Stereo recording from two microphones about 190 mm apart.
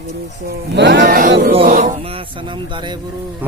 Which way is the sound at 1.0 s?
45° right (ahead or behind).